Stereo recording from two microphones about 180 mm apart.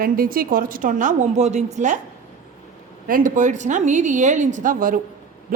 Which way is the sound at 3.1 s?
50° right (ahead or behind).